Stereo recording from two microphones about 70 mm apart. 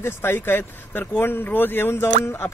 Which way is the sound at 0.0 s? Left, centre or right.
Left.